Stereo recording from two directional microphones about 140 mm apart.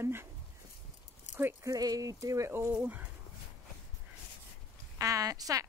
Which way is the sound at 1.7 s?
25° right (ahead or behind).